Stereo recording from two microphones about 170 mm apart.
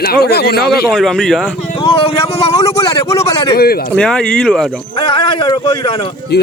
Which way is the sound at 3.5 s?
65° left (ahead or behind).